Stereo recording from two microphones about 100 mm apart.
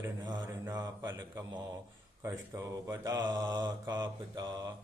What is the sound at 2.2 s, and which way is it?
Speech, 25° right (ahead or behind).